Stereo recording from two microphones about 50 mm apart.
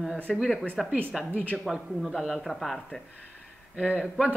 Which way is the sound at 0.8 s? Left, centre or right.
Centre.